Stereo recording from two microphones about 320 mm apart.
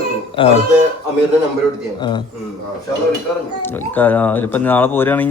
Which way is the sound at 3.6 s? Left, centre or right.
Centre.